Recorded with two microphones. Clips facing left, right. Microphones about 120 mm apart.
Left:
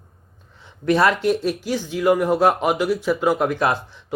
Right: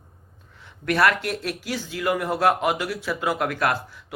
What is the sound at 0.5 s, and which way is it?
A man's voice, 20° left (ahead or behind).